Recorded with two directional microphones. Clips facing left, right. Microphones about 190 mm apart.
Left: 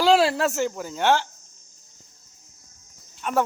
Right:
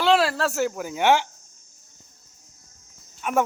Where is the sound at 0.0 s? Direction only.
25° left (ahead or behind).